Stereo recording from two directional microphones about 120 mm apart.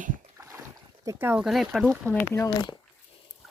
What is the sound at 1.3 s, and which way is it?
Speech, centre (ahead or behind).